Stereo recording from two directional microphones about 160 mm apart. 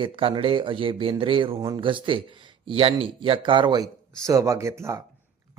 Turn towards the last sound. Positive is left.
turn(degrees=-15)  # may be behind; listen again after turning